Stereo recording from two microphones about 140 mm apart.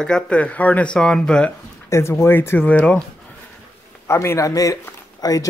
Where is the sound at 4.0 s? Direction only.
20° left (ahead or behind).